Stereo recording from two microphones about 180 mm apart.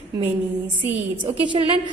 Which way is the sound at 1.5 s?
25° right (ahead or behind).